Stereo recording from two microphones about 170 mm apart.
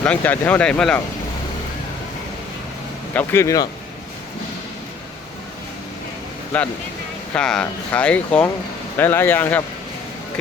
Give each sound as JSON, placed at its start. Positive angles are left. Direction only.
{"t": 0.0, "sound": "speech", "side_deg": 10}
{"t": 3.2, "sound": "speech", "side_deg": 15}
{"t": 6.5, "sound": "speech", "side_deg": 5}